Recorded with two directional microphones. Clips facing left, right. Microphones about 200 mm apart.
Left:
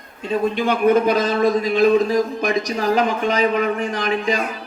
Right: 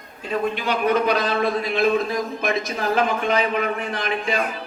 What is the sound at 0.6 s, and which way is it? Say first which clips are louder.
A man's voice: left 6 dB; 50° left (ahead or behind).